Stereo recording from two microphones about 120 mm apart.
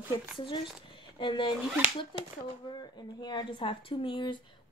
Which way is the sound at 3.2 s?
40° left (ahead or behind).